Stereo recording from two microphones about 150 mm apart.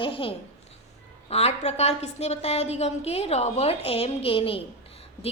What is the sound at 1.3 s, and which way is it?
A woman's voice, 45° left (ahead or behind).